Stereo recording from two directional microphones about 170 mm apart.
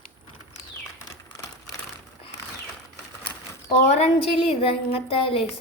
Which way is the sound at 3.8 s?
40° left (ahead or behind).